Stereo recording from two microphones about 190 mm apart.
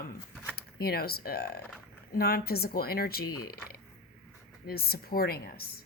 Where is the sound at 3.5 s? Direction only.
55° left (ahead or behind).